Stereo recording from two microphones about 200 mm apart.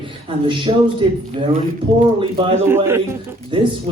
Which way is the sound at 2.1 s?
25° right (ahead or behind).